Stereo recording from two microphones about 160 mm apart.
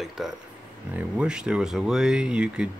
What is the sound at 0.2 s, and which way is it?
Speech, centre (ahead or behind).